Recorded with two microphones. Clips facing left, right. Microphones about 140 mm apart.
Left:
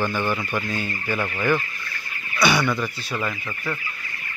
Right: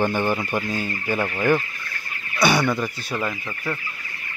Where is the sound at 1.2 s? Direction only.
25° right (ahead or behind).